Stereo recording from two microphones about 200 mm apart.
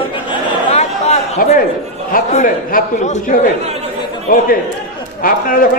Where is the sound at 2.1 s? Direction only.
45° left (ahead or behind).